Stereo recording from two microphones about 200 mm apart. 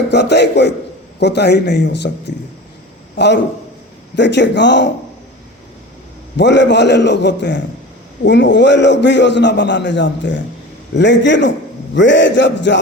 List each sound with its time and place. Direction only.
0.1 s a man's voice: 60° left (ahead or behind)
3.2 s a man's voice: 60° left (ahead or behind)
6.3 s a man's voice: 60° left (ahead or behind)